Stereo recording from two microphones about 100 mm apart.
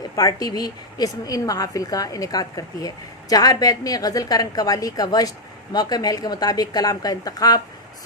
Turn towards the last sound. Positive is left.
turn(degrees=40)  # may be behind; listen again after turning